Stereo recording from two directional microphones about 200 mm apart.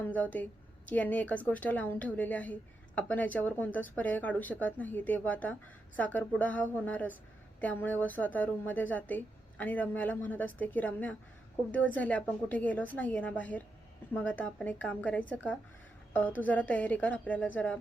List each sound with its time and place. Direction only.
0.0 s a woman's voice: 5° left (ahead or behind)